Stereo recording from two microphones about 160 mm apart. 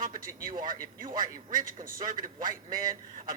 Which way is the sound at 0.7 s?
60° right (ahead or behind).